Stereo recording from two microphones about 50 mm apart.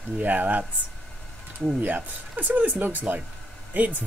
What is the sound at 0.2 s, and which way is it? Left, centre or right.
Speech, right.